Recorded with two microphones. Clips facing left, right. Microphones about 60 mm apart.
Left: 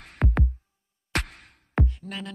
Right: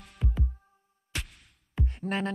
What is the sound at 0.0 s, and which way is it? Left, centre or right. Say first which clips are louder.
Music: left 8 dB; left.